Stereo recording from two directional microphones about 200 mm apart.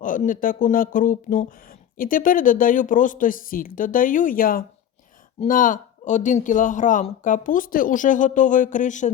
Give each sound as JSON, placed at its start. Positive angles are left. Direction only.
{"t": 0.0, "sound": "speech", "side_deg": 40}